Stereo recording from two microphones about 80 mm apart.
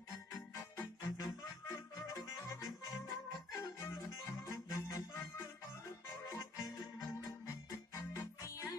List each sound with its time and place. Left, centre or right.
0.7 s music: left
3.5 s music: left
6.2 s music: left